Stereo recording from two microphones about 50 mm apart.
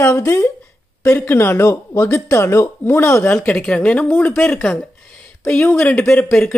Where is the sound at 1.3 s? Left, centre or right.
Left.